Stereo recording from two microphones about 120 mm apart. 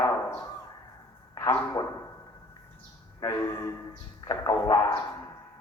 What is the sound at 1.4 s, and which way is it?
Speech, 30° left (ahead or behind).